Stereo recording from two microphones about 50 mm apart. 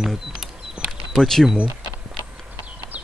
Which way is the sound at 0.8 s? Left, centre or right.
Centre.